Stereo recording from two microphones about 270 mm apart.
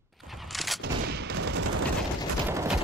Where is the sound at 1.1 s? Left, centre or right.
Right.